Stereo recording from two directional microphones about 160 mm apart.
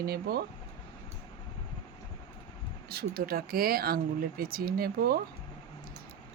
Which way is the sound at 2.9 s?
70° right (ahead or behind).